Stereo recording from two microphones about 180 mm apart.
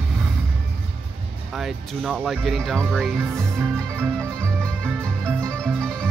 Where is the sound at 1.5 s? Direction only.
Centre (ahead or behind).